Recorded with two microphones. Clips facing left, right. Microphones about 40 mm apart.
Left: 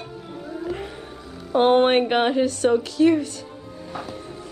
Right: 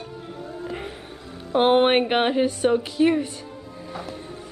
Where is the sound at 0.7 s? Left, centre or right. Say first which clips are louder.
Left 3 dB; right.